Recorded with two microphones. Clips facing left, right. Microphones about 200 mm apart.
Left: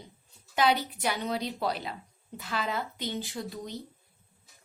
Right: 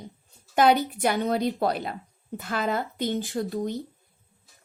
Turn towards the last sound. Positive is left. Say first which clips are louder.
# right 9 dB
turn(degrees=-50)  # may be behind; listen again after turning